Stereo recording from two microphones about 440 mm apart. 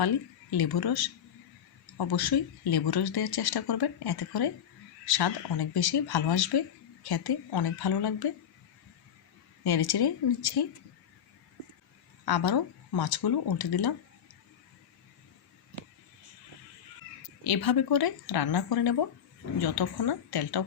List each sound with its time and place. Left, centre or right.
0.0 s speech: left
9.6 s speech: left
12.2 s speech: left
17.4 s speech: left